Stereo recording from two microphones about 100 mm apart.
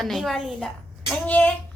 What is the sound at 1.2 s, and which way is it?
Speech, 15° left (ahead or behind).